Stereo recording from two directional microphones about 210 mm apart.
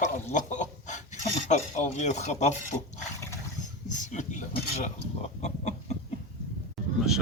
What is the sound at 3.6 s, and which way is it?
Speech, 35° left (ahead or behind).